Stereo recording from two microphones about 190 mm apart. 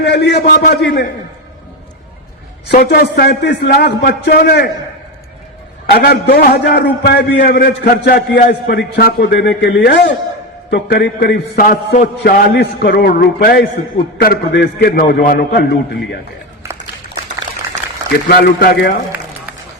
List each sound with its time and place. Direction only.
0.0 s a man's voice: 60° left (ahead or behind)
2.6 s a man's voice: 55° left (ahead or behind)
5.8 s a man's voice: 50° left (ahead or behind)
18.3 s a man's voice: 55° left (ahead or behind)